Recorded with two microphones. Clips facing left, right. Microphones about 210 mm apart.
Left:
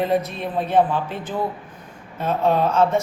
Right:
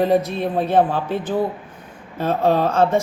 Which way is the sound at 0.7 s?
30° right (ahead or behind).